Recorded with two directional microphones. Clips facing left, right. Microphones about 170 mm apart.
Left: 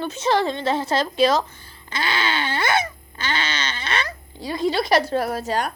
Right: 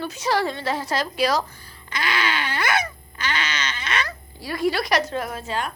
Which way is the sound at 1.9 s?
30° left (ahead or behind).